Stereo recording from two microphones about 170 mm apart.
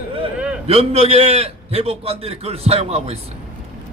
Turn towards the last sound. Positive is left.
turn(degrees=-35)  # may be behind; listen again after turning